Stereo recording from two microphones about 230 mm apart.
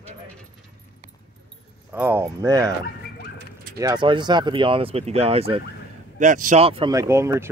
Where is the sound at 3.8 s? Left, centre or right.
Centre.